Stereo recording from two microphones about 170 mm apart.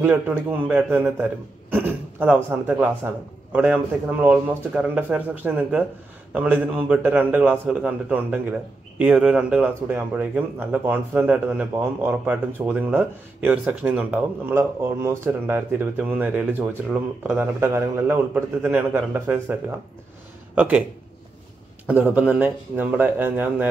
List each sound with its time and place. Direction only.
0.0 s a man's voice: 10° right (ahead or behind)
21.8 s a man's voice: 10° right (ahead or behind)